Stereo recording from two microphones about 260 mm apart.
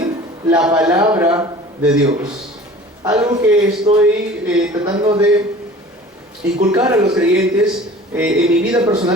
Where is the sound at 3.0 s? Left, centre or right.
Centre.